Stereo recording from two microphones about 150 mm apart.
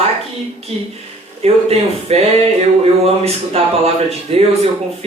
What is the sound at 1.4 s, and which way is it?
A man's voice, 45° right (ahead or behind).